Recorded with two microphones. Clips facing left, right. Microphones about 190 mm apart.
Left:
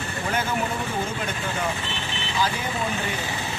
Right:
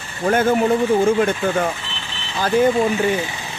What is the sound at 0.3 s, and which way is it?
Speech, 50° right (ahead or behind).